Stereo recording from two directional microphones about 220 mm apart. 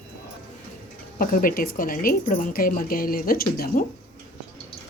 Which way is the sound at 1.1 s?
40° left (ahead or behind).